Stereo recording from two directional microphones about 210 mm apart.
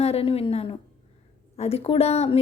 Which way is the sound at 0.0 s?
30° left (ahead or behind).